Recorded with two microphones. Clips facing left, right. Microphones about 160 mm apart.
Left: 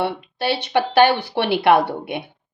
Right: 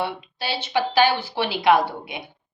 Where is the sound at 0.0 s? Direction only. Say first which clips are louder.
Left 5 dB; 60° left (ahead or behind).